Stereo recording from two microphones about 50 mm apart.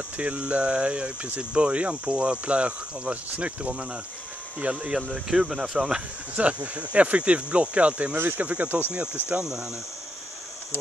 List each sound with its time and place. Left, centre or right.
0.2 s speech: right
5.1 s speech: centre
6.3 s speech: right
9.4 s speech: centre